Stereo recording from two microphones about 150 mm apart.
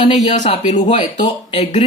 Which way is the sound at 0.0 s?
50° left (ahead or behind).